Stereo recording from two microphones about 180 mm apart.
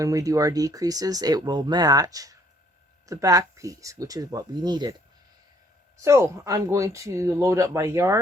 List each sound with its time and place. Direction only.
0.0 s speech: 20° right (ahead or behind)
6.0 s speech: 15° right (ahead or behind)